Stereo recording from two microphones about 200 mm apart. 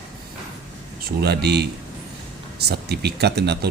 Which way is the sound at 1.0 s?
55° right (ahead or behind).